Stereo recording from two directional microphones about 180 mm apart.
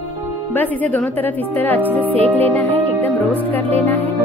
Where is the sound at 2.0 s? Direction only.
30° right (ahead or behind).